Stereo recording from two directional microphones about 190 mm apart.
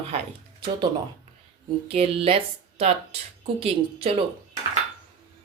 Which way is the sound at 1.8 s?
30° right (ahead or behind).